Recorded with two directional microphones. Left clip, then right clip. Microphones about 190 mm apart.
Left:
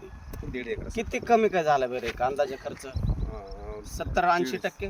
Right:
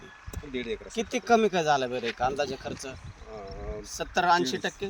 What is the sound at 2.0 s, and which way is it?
Speech, 5° left (ahead or behind).